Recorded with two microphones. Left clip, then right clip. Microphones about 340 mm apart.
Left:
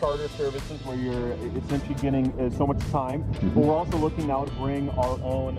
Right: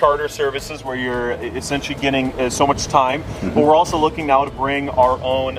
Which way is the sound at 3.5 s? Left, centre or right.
Right.